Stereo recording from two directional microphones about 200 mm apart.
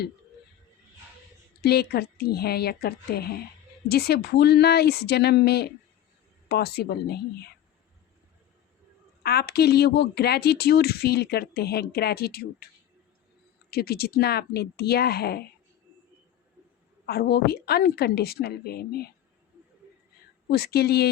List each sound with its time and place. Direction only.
1.6 s a woman's voice: 55° left (ahead or behind)
9.2 s a woman's voice: 50° left (ahead or behind)
13.7 s a woman's voice: 50° left (ahead or behind)
17.1 s a woman's voice: 50° left (ahead or behind)
20.5 s a woman's voice: 50° left (ahead or behind)